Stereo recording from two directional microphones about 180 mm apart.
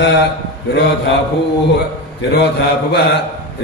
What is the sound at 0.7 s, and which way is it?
Speech, 65° left (ahead or behind).